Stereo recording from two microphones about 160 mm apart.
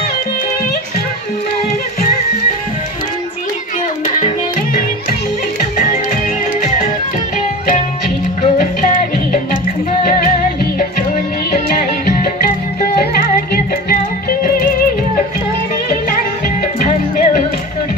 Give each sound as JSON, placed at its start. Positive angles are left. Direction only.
{"t": 8.4, "sound": "music", "side_deg": 60}
{"t": 12.8, "sound": "music", "side_deg": 70}
{"t": 16.8, "sound": "music", "side_deg": 50}